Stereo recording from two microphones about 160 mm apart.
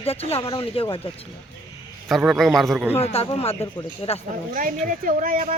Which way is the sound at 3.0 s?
40° left (ahead or behind).